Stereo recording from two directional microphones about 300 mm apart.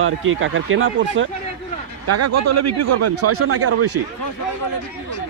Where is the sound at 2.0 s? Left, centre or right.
Right.